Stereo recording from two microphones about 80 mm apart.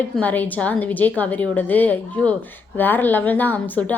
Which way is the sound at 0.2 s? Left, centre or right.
Left.